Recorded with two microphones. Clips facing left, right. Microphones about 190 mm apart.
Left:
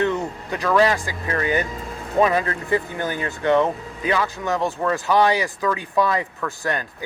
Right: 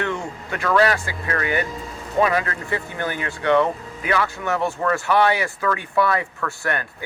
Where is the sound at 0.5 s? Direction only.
15° left (ahead or behind).